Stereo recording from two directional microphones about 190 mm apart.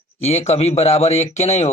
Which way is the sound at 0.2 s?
35° left (ahead or behind).